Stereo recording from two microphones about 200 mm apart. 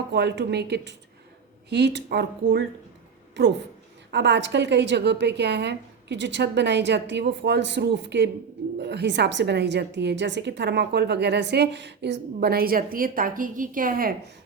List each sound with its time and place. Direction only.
0.1 s a woman's voice: 60° right (ahead or behind)
4.1 s a woman's voice: 60° right (ahead or behind); by 14.1 s 45° right (ahead or behind)